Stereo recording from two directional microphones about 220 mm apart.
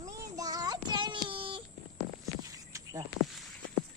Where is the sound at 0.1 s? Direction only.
15° right (ahead or behind).